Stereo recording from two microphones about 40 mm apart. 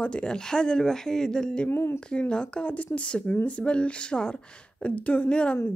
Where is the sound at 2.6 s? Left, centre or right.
Left.